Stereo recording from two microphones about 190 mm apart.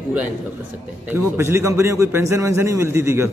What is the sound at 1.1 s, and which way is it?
A man's voice, 15° right (ahead or behind).